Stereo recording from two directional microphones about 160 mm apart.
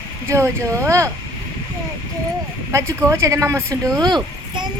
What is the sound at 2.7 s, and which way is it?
Speech, 15° right (ahead or behind).